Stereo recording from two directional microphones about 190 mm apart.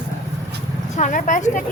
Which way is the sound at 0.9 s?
40° left (ahead or behind).